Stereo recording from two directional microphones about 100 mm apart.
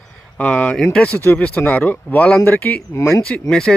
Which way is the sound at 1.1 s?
20° left (ahead or behind).